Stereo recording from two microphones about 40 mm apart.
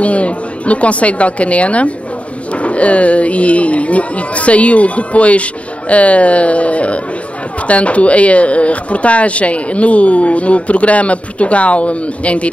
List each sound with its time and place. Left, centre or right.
0.0 s a woman's voice: left